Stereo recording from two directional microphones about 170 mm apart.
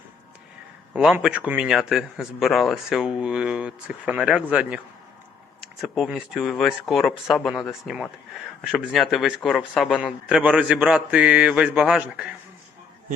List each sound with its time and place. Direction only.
0.9 s a man's voice: 5° right (ahead or behind)